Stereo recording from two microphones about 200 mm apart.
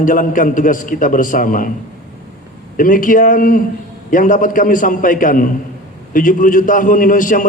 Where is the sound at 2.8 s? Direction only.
40° left (ahead or behind).